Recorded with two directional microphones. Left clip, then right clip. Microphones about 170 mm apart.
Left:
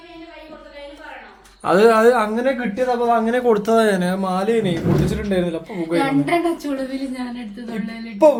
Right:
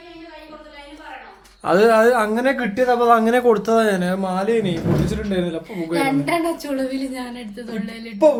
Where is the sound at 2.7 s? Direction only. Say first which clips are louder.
Right 4 dB; 30° right (ahead or behind).